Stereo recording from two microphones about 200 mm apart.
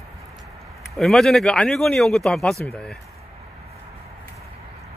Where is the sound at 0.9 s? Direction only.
Centre (ahead or behind).